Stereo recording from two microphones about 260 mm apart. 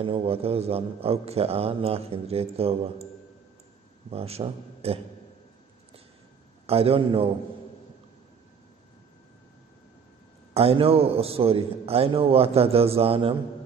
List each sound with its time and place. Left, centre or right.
0.0 s a man's voice: right
4.1 s a man's voice: right
6.6 s a man's voice: right
10.5 s a man's voice: right